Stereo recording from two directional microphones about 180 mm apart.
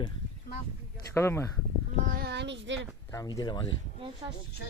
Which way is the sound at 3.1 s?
20° left (ahead or behind).